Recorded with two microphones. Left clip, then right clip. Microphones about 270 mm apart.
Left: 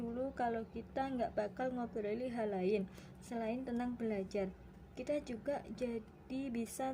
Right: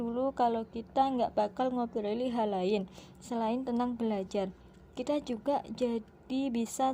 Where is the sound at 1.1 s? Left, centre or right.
Right.